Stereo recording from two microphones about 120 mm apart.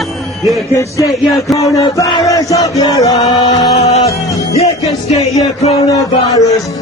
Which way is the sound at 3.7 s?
65° left (ahead or behind).